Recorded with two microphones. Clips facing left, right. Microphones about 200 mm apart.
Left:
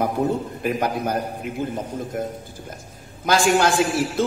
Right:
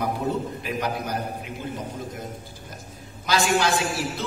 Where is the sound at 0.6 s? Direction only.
50° left (ahead or behind).